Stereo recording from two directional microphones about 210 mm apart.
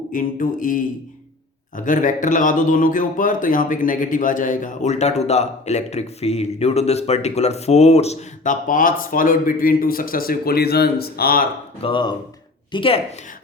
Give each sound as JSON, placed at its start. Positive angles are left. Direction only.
{"t": 0.1, "sound": "speech", "side_deg": 40}
{"t": 11.8, "sound": "speech", "side_deg": 25}